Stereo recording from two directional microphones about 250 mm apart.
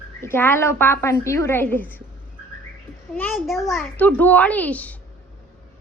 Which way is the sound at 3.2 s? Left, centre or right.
Centre.